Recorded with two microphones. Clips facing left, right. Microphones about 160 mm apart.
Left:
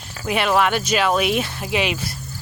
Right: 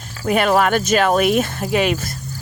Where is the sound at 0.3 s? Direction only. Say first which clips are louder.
Right 3 dB; 45° right (ahead or behind).